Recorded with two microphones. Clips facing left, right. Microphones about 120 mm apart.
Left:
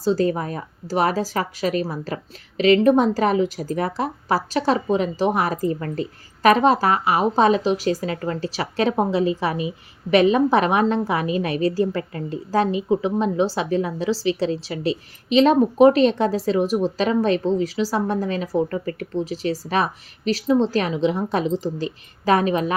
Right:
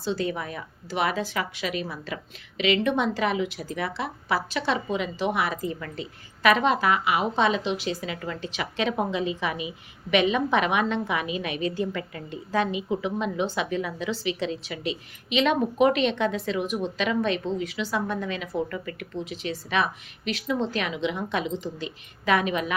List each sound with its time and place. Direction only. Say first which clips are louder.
0.0 s a woman's voice: left 8 dB; 40° left (ahead or behind)